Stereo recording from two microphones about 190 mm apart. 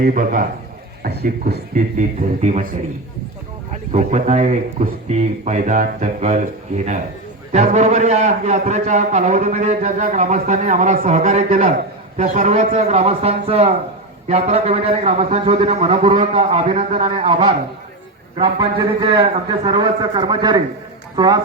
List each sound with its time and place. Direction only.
0.0 s a man's voice: 45° right (ahead or behind)
1.0 s speech: 55° right (ahead or behind)
1.7 s a man's voice: 40° right (ahead or behind)
3.9 s a man's voice: 35° right (ahead or behind)
18.9 s a man's voice: 25° right (ahead or behind)